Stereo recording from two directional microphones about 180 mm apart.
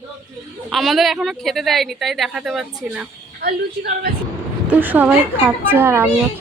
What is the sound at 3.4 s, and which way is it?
Speech, 55° right (ahead or behind).